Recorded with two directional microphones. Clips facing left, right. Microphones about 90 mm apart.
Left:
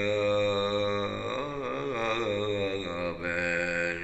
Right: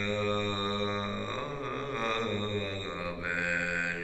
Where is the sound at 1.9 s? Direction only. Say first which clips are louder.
Left 1 dB; 40° right (ahead or behind).